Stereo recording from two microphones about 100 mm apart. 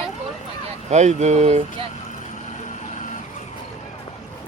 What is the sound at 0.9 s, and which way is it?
Speech, 90° right.